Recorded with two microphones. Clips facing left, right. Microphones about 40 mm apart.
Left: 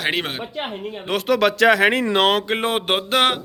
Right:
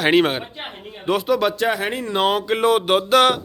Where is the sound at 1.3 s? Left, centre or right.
Left.